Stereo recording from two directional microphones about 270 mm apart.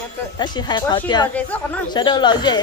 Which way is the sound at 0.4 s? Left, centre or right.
Centre.